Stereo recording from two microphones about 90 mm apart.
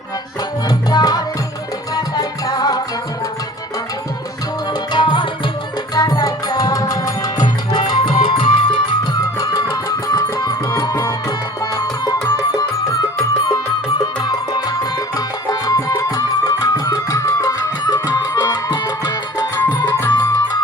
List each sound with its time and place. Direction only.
0.9 s music: 45° left (ahead or behind)
4.9 s music: 60° left (ahead or behind)
5.9 s music: 45° left (ahead or behind)
7.7 s music: 55° left (ahead or behind)
9.4 s music: 40° left (ahead or behind)
14.2 s music: 50° left (ahead or behind)